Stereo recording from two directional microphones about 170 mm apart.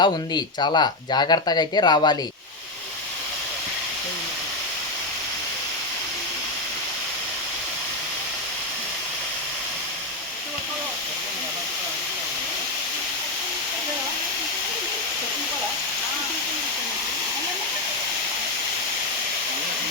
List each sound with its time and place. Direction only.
0.0 s speech: 25° left (ahead or behind)